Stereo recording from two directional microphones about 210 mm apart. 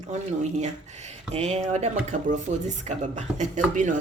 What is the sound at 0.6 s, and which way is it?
Speech, 35° right (ahead or behind).